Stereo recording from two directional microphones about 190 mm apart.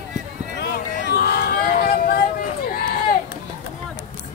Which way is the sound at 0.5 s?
55° left (ahead or behind).